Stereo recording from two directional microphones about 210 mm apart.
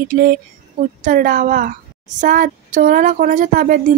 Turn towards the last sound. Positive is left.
turn(degrees=-40)  # may be behind; listen again after turning